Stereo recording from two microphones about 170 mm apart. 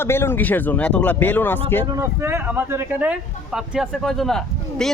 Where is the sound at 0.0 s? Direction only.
15° left (ahead or behind).